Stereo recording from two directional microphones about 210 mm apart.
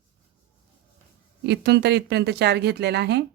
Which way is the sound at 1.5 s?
50° right (ahead or behind).